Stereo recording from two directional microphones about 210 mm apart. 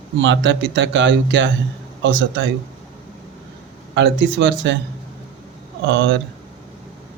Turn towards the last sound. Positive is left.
turn(degrees=-60)  # may be behind; listen again after turning